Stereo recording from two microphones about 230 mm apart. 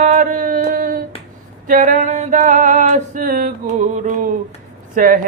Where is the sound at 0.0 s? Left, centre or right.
Right.